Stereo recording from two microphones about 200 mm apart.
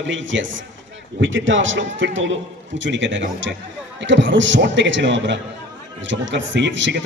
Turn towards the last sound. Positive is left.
turn(degrees=-65)  # may be behind; listen again after turning